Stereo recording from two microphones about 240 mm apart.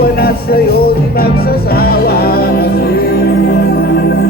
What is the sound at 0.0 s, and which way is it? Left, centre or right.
Music, left.